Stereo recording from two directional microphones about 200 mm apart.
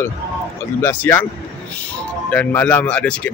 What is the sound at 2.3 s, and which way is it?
Speech, 5° left (ahead or behind).